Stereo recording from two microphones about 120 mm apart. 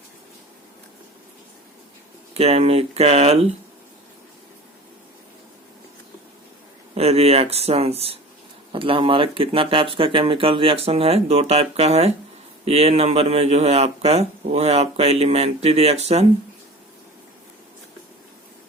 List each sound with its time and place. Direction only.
2.3 s speech: 55° right (ahead or behind)
6.9 s speech: 60° right (ahead or behind)
8.7 s speech: 45° right (ahead or behind)